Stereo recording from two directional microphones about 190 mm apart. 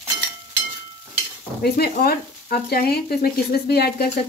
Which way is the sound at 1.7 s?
55° left (ahead or behind).